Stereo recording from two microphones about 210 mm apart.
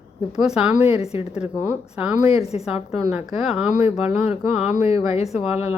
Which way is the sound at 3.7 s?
30° left (ahead or behind).